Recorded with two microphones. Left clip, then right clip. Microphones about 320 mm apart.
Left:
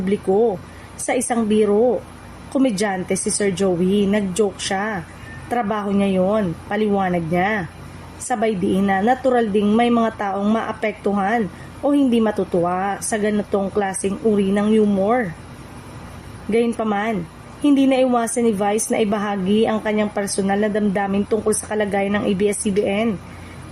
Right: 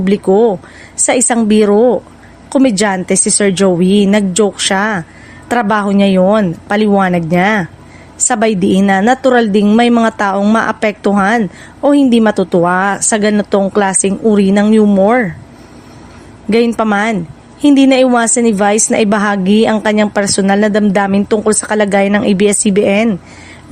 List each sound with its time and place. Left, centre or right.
0.0 s a woman's voice: right
16.5 s a woman's voice: right